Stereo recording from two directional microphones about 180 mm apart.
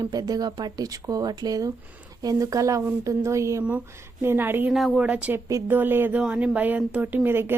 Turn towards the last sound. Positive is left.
turn(degrees=-10)  # may be behind; listen again after turning